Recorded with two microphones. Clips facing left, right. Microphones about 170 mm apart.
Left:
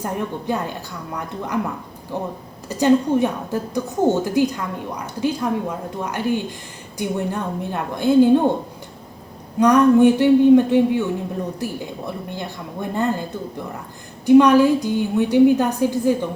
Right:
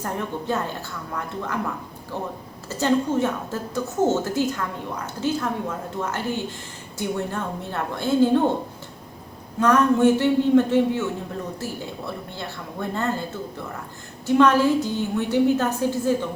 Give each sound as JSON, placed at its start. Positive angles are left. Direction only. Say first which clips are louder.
{"t": 0.0, "sound": "a woman's voice", "louder": "left 3 dB", "side_deg": 15}
{"t": 9.6, "sound": "a woman's voice", "louder": "left 5 dB", "side_deg": 15}